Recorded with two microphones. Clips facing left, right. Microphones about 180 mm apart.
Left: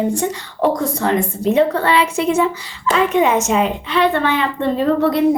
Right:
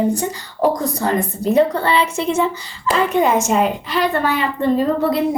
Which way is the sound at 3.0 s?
35° right (ahead or behind).